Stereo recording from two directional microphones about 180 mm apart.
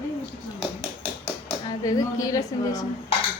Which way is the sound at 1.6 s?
20° left (ahead or behind).